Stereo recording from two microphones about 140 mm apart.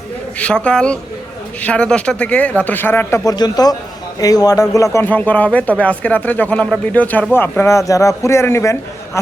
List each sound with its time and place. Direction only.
0.3 s a man's voice: 10° left (ahead or behind)
3.2 s a man's voice: 30° left (ahead or behind)